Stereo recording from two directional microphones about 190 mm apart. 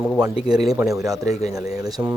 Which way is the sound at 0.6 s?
Centre (ahead or behind).